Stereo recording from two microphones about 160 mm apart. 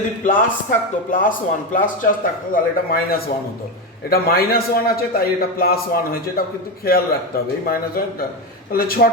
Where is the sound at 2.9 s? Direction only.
70° left (ahead or behind).